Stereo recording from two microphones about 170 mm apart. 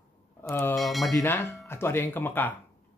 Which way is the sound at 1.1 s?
15° left (ahead or behind).